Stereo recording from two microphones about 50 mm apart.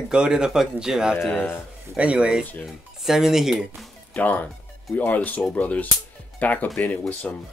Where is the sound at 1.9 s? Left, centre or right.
Right.